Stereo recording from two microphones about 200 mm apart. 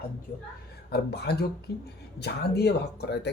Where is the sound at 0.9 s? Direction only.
55° left (ahead or behind).